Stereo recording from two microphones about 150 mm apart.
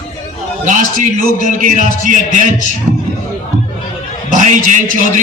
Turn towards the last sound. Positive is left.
turn(degrees=-60)  # may be behind; listen again after turning